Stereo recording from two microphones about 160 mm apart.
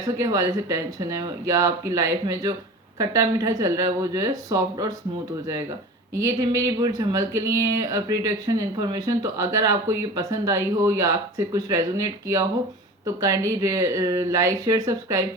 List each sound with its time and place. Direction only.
0.0 s speech: 20° right (ahead or behind)
6.1 s speech: 20° right (ahead or behind)
13.1 s speech: 20° right (ahead or behind)